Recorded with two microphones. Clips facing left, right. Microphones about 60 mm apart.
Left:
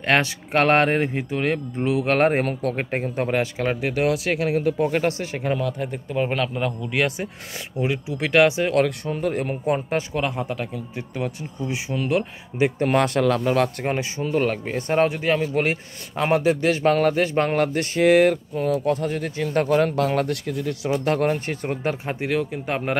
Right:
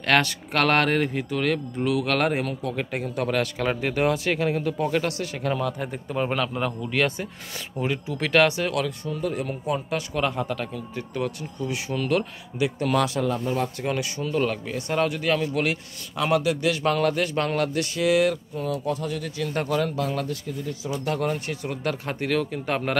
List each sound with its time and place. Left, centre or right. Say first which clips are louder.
0.0 s speech: left 1 dB; left
3.6 s speech: even; centre
4.9 s speech: left 3 dB; left
5.6 s speech: left 2 dB; centre
8.8 s a man's voice: left 4 dB; left
10.1 s speech: left 1 dB; centre
12.5 s speech: left 3 dB; left
13.2 s speech: left 6 dB; left
13.8 s a man's voice: left 2 dB; left
20.0 s speech: left 6 dB; left
20.9 s a man's voice: left 5 dB; left
21.8 s speech: even; centre